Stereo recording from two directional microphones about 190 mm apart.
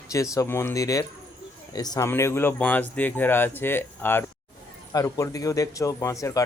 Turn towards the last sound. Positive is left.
turn(degrees=15)  # may be behind; listen again after turning